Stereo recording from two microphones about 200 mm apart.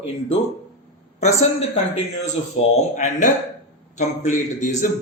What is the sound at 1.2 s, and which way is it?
A man's voice, 35° left (ahead or behind).